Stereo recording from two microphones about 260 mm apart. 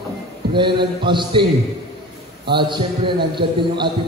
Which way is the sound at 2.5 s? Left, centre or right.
Centre.